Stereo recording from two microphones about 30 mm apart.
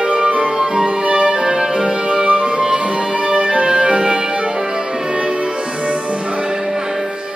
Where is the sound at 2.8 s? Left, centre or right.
Right.